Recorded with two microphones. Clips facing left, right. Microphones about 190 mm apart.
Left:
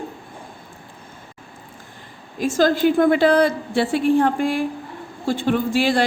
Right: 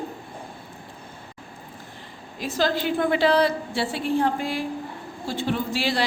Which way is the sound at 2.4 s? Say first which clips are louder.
Left 7 dB; 45° left (ahead or behind).